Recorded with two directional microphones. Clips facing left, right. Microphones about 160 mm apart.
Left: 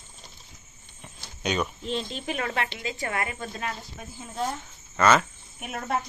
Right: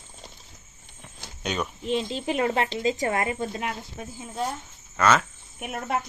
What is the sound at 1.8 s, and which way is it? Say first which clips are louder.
Speech: right 4 dB; 15° right (ahead or behind).